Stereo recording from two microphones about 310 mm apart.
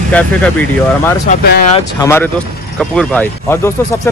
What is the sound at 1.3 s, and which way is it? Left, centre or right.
Speech, left.